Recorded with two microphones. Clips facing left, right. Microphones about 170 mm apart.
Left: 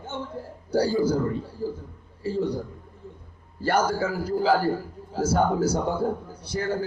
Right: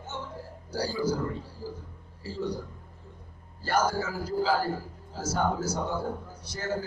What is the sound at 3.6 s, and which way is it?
A man's voice, 60° left (ahead or behind).